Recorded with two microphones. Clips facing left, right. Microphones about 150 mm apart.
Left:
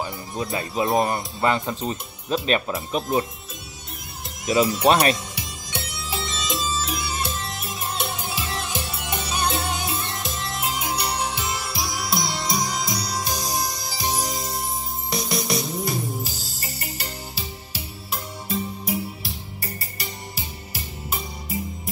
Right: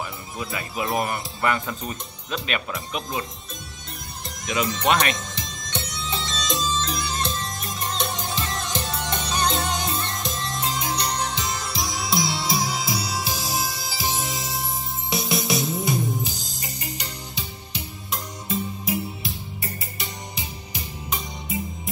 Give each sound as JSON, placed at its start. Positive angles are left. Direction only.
{"t": 0.0, "sound": "speech", "side_deg": 25}
{"t": 4.5, "sound": "speech", "side_deg": 35}
{"t": 5.1, "sound": "music", "side_deg": 10}